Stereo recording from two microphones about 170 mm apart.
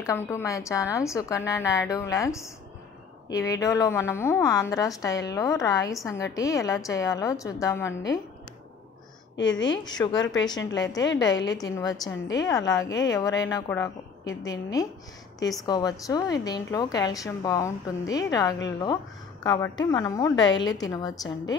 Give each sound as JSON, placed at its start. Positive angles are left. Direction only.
{"t": 0.0, "sound": "a woman's voice", "side_deg": 15}
{"t": 9.7, "sound": "a woman's voice", "side_deg": 25}